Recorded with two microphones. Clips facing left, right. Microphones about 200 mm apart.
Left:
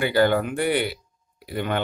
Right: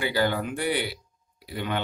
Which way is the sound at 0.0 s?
55° left (ahead or behind).